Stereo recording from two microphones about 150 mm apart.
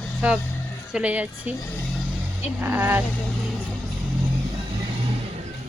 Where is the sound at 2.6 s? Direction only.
15° right (ahead or behind).